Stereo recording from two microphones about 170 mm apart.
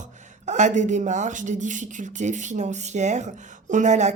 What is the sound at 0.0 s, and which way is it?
Speech, 45° right (ahead or behind).